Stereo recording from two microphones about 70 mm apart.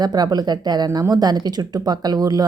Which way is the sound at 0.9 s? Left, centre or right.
Right.